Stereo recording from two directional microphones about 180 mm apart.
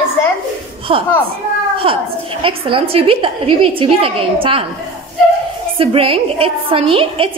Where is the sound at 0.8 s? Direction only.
30° right (ahead or behind).